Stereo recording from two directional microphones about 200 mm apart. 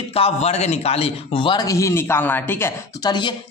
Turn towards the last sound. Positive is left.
turn(degrees=10)  # may be behind; listen again after turning